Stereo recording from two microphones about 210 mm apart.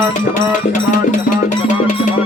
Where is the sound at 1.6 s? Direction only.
35° left (ahead or behind).